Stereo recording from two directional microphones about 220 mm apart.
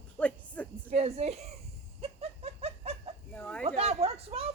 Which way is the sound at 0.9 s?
30° right (ahead or behind).